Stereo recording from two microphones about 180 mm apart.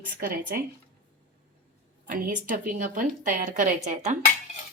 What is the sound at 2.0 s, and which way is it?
A woman's voice, 50° right (ahead or behind).